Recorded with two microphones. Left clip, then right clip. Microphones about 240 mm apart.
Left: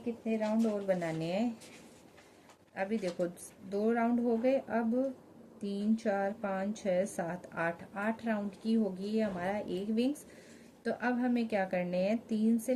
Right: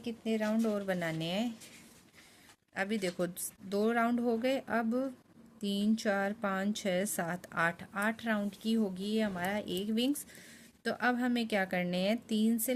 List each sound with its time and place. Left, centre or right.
0.3 s a woman's voice: right
2.7 s a woman's voice: right
10.8 s speech: right